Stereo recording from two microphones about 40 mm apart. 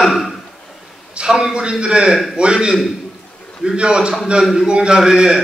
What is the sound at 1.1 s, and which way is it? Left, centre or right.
A man's voice, centre.